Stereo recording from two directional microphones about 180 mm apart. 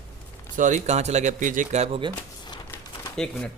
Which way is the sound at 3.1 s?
5° left (ahead or behind).